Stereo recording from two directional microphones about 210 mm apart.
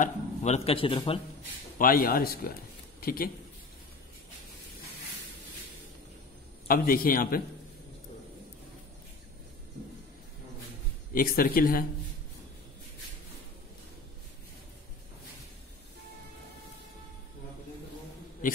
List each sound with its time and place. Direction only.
0.0 s a man's voice: 30° left (ahead or behind)
1.8 s a man's voice: 45° left (ahead or behind)
6.7 s a man's voice: 45° left (ahead or behind)
11.1 s a man's voice: 45° left (ahead or behind)